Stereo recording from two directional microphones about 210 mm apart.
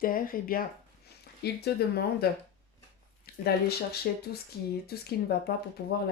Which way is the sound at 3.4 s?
50° left (ahead or behind).